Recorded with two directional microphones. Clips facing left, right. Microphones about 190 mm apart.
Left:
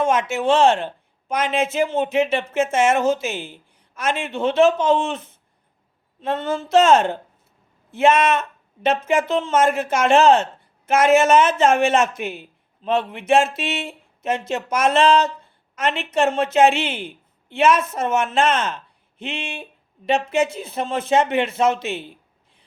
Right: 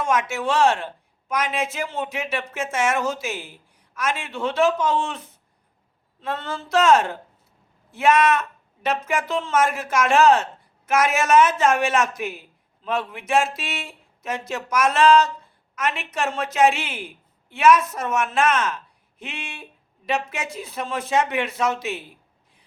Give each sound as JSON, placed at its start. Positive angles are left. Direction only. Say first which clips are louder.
{"t": 0.0, "sound": "speech", "louder": "left 4 dB", "side_deg": 25}